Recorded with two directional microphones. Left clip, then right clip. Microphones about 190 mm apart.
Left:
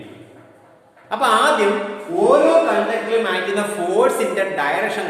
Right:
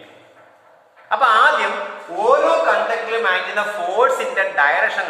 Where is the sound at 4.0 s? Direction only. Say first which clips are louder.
Right 1 dB; 10° left (ahead or behind).